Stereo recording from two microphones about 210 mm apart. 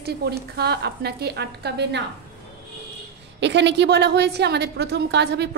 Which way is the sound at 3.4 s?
55° right (ahead or behind).